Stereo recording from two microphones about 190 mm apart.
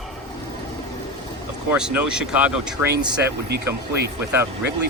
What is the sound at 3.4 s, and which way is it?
Speech, 55° right (ahead or behind).